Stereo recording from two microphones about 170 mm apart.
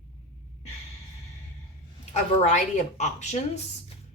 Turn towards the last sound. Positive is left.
turn(degrees=40)  # may be behind; listen again after turning